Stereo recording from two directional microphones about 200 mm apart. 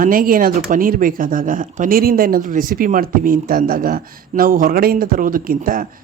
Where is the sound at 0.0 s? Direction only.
45° right (ahead or behind).